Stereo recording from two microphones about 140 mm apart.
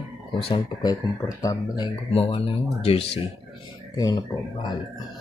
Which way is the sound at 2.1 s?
45° left (ahead or behind).